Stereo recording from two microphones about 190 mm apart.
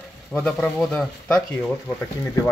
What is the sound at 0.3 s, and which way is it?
Speech, 5° left (ahead or behind).